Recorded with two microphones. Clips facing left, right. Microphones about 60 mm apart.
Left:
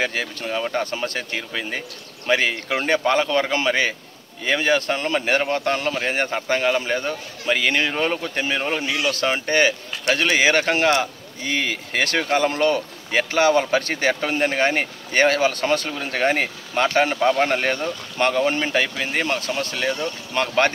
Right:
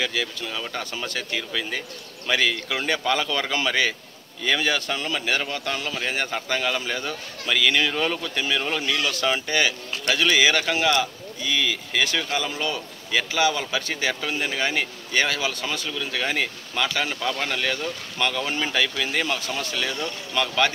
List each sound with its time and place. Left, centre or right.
0.0 s speech: left
9.1 s speech: left